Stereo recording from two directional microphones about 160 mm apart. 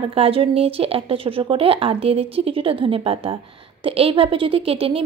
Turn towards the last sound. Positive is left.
turn(degrees=-35)  # may be behind; listen again after turning